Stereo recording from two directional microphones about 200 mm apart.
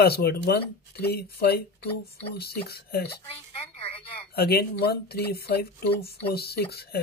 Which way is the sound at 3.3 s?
30° left (ahead or behind).